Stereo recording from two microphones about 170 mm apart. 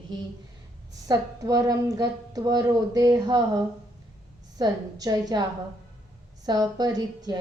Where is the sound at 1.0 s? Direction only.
20° right (ahead or behind).